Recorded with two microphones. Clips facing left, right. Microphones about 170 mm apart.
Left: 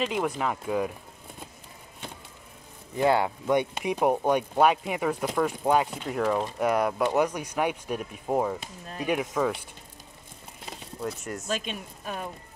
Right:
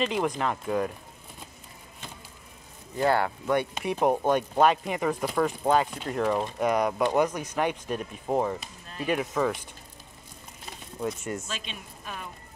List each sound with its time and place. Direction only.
0.0 s speech: 5° left (ahead or behind)
3.0 s speech: 20° left (ahead or behind)
8.5 s speech: 15° left (ahead or behind)
9.2 s speech: centre (ahead or behind)
11.0 s speech: centre (ahead or behind)
11.4 s speech: 45° left (ahead or behind)